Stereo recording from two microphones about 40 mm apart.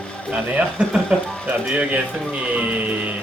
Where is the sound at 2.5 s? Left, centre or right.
Right.